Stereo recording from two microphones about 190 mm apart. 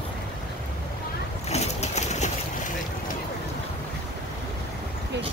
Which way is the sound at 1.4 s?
35° left (ahead or behind).